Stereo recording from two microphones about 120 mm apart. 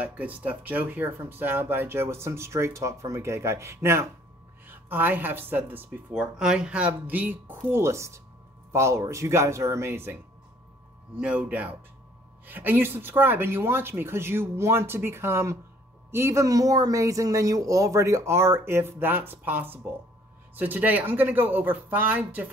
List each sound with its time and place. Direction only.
0.0 s speech: 15° right (ahead or behind)
11.1 s speech: 10° right (ahead or behind)